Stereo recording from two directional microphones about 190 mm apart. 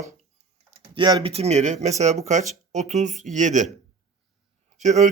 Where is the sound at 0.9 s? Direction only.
25° right (ahead or behind); by 3.7 s 40° right (ahead or behind).